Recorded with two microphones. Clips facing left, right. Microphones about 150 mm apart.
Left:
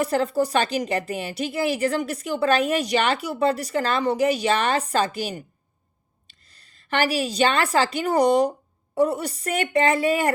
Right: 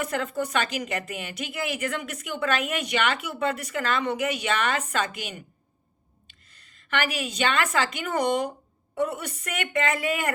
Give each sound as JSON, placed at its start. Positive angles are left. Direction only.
{"t": 0.0, "sound": "a woman's voice", "side_deg": 35}